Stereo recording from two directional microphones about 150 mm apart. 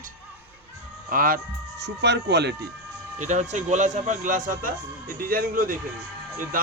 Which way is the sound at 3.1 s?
55° right (ahead or behind).